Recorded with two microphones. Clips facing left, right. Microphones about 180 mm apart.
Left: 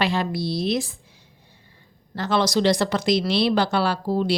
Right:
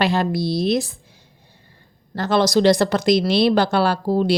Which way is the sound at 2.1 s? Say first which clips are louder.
Right 4 dB; 40° right (ahead or behind).